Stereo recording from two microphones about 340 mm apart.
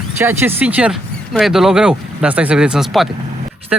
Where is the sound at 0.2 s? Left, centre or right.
Centre.